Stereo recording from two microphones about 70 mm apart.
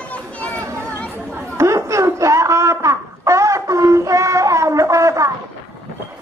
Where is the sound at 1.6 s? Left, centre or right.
Right.